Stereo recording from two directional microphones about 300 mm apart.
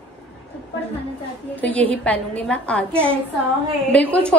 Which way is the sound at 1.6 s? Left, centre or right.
Centre.